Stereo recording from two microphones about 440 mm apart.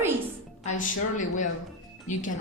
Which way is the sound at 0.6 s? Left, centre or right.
Centre.